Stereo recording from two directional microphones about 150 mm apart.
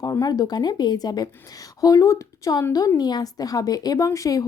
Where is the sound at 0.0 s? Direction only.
25° left (ahead or behind).